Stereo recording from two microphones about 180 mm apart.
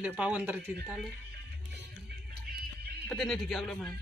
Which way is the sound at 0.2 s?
10° right (ahead or behind).